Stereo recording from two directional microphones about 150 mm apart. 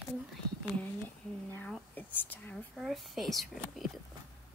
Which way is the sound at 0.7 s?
10° left (ahead or behind).